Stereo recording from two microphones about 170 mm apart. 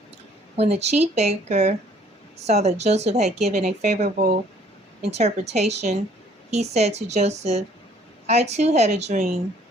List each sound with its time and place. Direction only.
0.5 s a woman's voice: 40° right (ahead or behind)